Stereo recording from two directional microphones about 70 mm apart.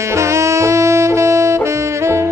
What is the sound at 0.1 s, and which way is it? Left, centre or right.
Saxophone, right.